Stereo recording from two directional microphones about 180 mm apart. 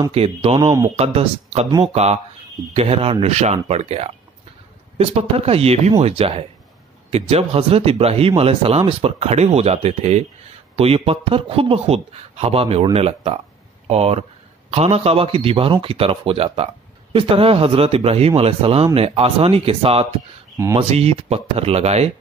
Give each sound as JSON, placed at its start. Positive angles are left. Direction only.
{"t": 0.1, "sound": "speech", "side_deg": -30}
{"t": 2.7, "sound": "speech", "side_deg": -35}